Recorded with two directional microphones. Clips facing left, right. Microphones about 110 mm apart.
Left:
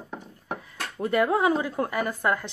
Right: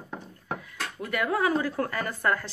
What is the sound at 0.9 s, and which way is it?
Speech, 25° left (ahead or behind).